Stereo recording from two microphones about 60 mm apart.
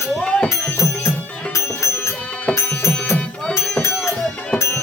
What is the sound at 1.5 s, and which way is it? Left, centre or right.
Music, left.